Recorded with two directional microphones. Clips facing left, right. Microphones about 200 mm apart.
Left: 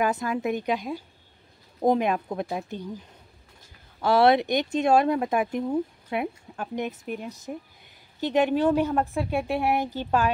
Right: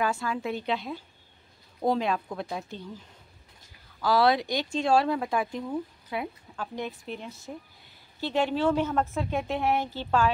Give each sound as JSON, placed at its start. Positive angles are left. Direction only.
{"t": 0.0, "sound": "a woman's voice", "side_deg": 20}
{"t": 4.0, "sound": "a woman's voice", "side_deg": 25}